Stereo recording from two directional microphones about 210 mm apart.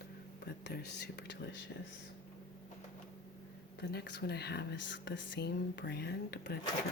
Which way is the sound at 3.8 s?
55° left (ahead or behind).